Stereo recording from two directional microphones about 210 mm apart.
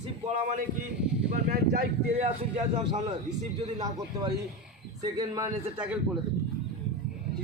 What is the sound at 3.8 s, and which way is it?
A man's voice, 15° right (ahead or behind).